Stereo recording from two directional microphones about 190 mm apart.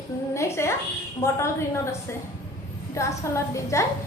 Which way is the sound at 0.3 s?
15° left (ahead or behind).